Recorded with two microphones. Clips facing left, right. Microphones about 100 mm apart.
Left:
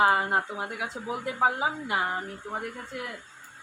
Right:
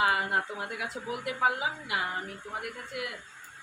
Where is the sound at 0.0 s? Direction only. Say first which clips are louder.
Left 4 dB; 35° left (ahead or behind).